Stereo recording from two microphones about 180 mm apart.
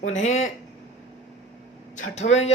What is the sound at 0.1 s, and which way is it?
Speech, 40° left (ahead or behind).